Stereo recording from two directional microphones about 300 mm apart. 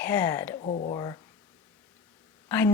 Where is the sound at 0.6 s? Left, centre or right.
Left.